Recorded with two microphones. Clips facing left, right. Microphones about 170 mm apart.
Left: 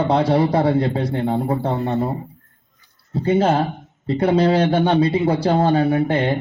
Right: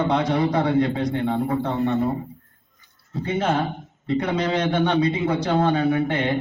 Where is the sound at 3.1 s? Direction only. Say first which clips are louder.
Left 6 dB; 35° left (ahead or behind).